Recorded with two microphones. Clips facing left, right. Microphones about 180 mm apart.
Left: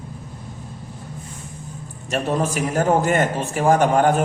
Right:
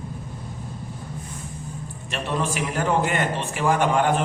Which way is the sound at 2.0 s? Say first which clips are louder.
Left 5 dB; 45° left (ahead or behind).